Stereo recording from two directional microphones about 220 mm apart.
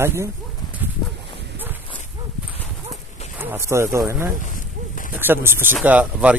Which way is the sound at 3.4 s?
10° right (ahead or behind).